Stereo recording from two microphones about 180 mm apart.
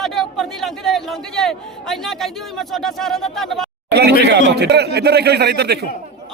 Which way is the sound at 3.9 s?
65° right (ahead or behind).